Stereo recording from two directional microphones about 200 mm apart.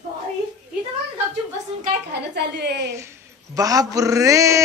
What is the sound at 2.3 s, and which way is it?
Speech, 55° right (ahead or behind).